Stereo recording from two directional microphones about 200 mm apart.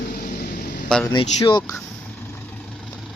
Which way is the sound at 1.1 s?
20° left (ahead or behind).